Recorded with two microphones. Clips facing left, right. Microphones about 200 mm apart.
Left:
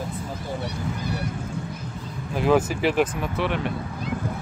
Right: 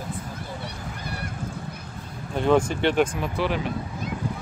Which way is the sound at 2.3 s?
5° left (ahead or behind).